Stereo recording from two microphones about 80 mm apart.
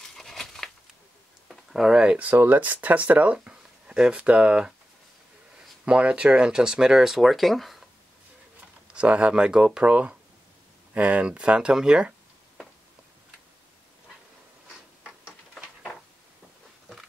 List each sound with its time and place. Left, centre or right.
0.1 s crumpling: centre
1.5 s speech: centre
5.9 s speech: centre
8.9 s speech: centre